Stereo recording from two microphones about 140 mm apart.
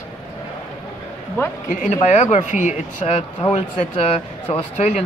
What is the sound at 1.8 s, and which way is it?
Speech, 55° left (ahead or behind).